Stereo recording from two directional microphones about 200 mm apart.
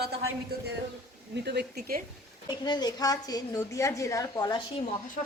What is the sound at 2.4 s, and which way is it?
A woman's voice, 20° left (ahead or behind).